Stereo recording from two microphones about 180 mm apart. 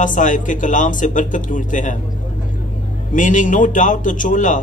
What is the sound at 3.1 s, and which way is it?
A man's voice, 45° left (ahead or behind).